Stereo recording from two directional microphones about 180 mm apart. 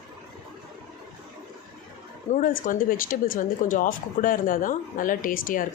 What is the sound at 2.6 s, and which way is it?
Speech, 50° left (ahead or behind).